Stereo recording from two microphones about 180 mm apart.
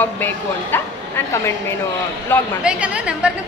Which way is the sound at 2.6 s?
5° right (ahead or behind).